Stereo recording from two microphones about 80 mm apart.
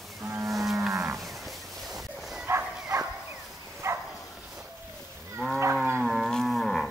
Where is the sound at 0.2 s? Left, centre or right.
Right.